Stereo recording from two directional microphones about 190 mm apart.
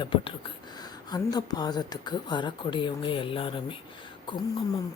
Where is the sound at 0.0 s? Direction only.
25° left (ahead or behind).